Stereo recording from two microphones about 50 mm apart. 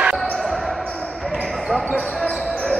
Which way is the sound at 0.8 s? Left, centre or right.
Centre.